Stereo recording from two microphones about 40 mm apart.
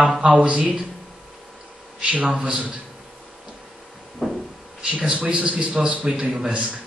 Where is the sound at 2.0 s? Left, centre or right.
Right.